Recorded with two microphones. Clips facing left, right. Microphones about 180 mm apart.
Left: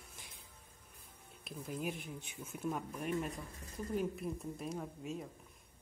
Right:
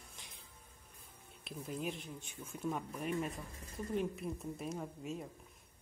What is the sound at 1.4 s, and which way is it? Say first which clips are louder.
Speech: even; centre (ahead or behind).